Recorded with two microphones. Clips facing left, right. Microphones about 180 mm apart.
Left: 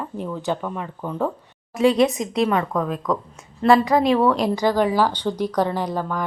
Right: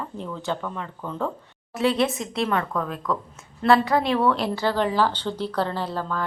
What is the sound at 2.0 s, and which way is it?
A woman's voice, 15° left (ahead or behind).